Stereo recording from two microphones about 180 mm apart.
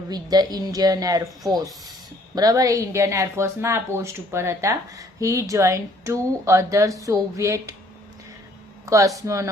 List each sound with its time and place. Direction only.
0.1 s a woman's voice: 20° right (ahead or behind)
8.9 s speech: 20° right (ahead or behind)